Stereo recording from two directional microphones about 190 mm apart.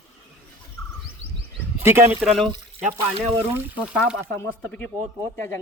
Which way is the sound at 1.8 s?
15° right (ahead or behind).